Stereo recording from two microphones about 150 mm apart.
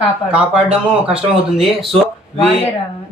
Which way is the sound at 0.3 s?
5° right (ahead or behind).